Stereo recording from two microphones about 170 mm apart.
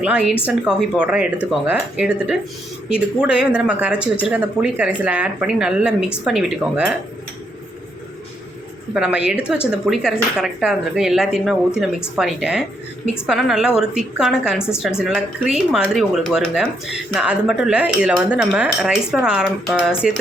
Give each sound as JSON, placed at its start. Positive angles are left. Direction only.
{"t": 0.0, "sound": "speech", "side_deg": -5}
{"t": 9.0, "sound": "speech", "side_deg": -5}